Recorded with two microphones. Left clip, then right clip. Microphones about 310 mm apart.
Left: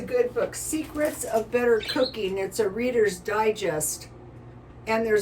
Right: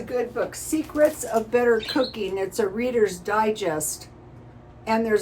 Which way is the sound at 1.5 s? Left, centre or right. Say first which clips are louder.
Right 3 dB; centre.